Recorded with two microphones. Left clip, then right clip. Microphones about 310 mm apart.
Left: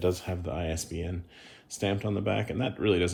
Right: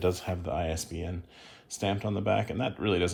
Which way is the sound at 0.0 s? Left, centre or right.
Right.